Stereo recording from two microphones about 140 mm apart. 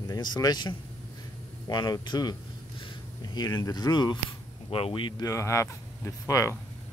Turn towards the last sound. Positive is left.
turn(degrees=20)  # may be behind; listen again after turning